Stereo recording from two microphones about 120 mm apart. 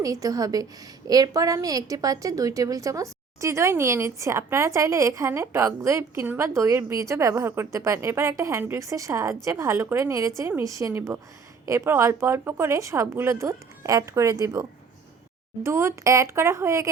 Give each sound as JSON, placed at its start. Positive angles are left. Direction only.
{"t": 0.0, "sound": "a woman's voice", "side_deg": -30}